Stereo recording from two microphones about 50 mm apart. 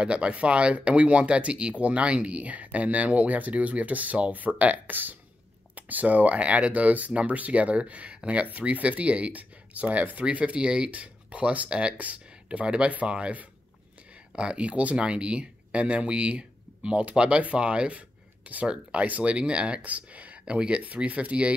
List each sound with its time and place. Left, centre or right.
0.0 s speech: right